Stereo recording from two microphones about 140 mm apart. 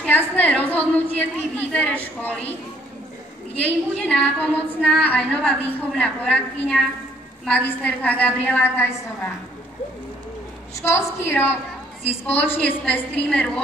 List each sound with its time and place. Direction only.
0.4 s a woman's voice: 10° left (ahead or behind)
3.5 s a woman's voice: 10° left (ahead or behind)
10.8 s a woman's voice: 20° left (ahead or behind)
12.0 s a woman's voice: 45° left (ahead or behind)
12.4 s a woman's voice: 10° left (ahead or behind)